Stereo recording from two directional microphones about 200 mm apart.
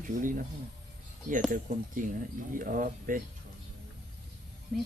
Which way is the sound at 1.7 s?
40° right (ahead or behind).